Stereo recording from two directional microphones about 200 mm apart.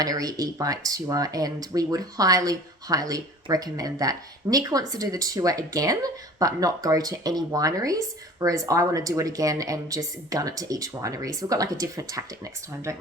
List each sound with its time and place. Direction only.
0.0 s speech: 20° right (ahead or behind)